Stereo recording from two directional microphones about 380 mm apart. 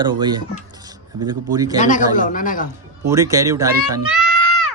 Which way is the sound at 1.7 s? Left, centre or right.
Centre.